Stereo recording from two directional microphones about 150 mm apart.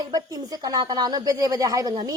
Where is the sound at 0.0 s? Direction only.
25° right (ahead or behind).